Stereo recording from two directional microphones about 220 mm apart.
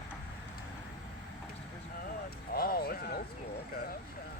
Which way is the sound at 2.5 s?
45° left (ahead or behind).